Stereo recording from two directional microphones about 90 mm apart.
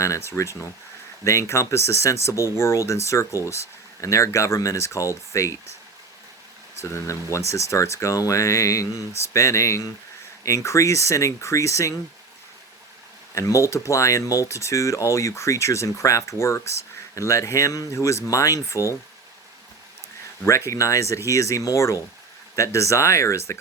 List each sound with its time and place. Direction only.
0.0 s speech: 30° left (ahead or behind)
6.7 s speech: 30° left (ahead or behind)
13.3 s speech: 35° left (ahead or behind)
20.4 s speech: 30° left (ahead or behind)